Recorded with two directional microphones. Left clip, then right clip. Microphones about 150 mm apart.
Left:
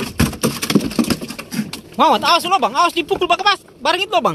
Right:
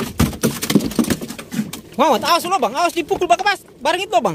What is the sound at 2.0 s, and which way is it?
Speech, 20° right (ahead or behind).